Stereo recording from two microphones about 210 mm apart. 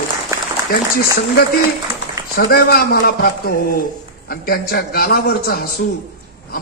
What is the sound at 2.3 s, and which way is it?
A man's voice, 45° left (ahead or behind).